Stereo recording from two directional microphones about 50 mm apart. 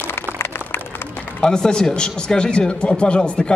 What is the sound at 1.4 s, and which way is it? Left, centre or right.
Speech, centre.